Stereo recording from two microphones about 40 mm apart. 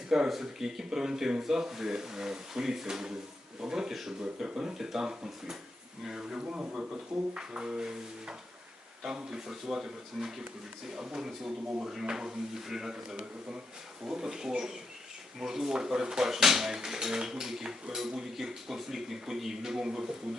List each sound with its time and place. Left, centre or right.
0.3 s speech: centre
14.0 s speech: centre